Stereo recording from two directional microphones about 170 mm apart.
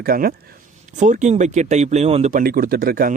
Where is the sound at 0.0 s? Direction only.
60° right (ahead or behind).